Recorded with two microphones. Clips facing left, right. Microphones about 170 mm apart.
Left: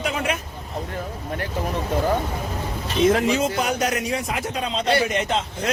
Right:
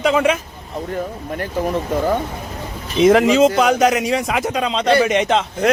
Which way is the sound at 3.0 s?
90° right.